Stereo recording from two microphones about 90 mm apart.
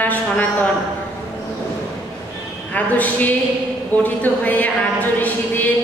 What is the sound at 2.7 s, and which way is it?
A woman's voice, 20° left (ahead or behind).